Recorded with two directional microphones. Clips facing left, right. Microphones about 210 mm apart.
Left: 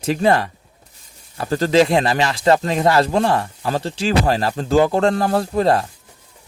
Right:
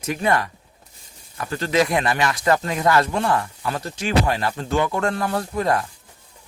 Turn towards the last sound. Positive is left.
turn(degrees=30)  # may be behind; listen again after turning